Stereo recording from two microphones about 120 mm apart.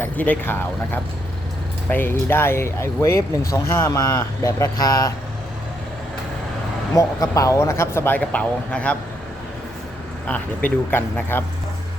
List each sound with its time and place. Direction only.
0.0 s speech: 15° left (ahead or behind); by 5.1 s 30° left (ahead or behind)
6.9 s speech: 25° left (ahead or behind); by 9.0 s 10° left (ahead or behind)
10.2 s speech: 15° left (ahead or behind)